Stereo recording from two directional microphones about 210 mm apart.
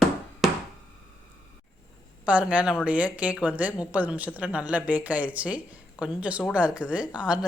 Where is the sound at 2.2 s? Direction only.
5° right (ahead or behind).